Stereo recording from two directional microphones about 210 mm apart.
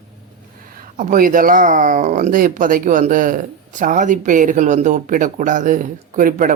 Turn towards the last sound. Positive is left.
turn(degrees=-40)  # may be behind; listen again after turning